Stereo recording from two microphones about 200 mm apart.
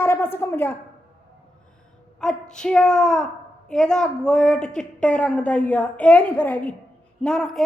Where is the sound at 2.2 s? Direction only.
5° left (ahead or behind).